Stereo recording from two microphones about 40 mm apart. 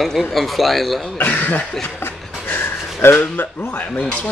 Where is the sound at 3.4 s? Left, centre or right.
Left.